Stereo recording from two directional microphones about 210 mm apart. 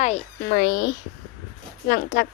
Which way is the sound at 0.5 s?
50° left (ahead or behind).